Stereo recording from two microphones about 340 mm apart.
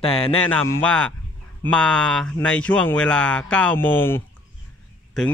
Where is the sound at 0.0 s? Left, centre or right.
Centre.